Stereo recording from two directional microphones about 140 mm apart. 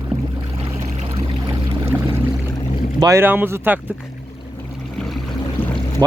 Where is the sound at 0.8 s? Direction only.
45° right (ahead or behind).